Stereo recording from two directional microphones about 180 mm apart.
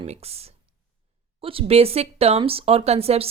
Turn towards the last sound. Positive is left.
turn(degrees=-35)  # may be behind; listen again after turning